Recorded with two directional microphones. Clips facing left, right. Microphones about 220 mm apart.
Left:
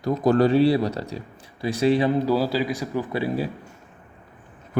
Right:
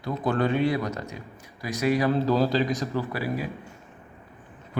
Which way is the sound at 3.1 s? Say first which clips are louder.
Left 5 dB; 30° left (ahead or behind).